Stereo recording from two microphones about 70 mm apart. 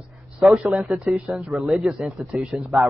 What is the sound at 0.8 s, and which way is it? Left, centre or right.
A man's voice, centre.